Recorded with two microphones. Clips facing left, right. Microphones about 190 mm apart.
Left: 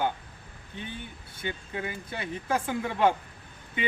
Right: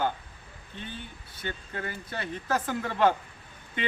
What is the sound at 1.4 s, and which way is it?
Speech, 15° left (ahead or behind).